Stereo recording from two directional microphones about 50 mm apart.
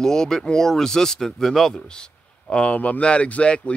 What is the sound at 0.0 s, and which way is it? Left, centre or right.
Speech, centre.